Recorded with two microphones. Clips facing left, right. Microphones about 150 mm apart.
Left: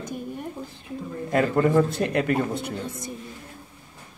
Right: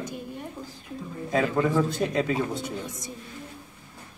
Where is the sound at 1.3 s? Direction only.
65° left (ahead or behind).